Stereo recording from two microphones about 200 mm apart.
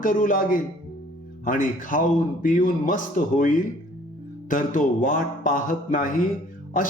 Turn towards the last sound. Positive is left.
turn(degrees=45)  # may be behind; listen again after turning